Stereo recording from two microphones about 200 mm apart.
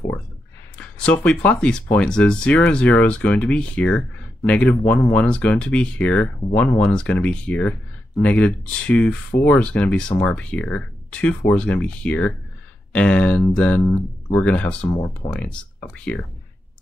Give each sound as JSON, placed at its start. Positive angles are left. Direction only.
{"t": 0.7, "sound": "speech", "side_deg": 5}
{"t": 14.9, "sound": "speech", "side_deg": 20}
{"t": 15.2, "sound": "speech", "side_deg": 5}